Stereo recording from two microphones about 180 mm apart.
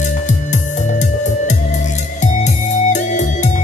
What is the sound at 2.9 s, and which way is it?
Music, 40° left (ahead or behind).